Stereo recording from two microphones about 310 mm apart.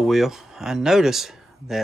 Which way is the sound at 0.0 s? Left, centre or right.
Centre.